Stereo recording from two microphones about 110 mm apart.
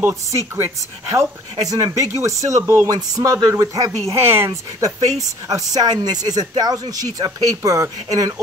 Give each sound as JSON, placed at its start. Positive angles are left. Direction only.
{"t": 0.3, "sound": "speech", "side_deg": -25}
{"t": 2.9, "sound": "speech", "side_deg": -35}